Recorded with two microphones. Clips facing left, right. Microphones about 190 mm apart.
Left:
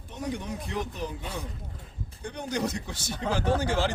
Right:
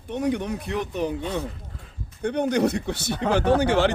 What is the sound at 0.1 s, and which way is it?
Speech, 65° right (ahead or behind).